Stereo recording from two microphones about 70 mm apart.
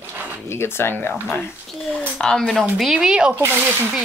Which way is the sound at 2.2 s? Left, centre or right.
Centre.